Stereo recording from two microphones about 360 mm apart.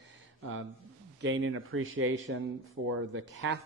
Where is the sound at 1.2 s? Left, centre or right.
Right.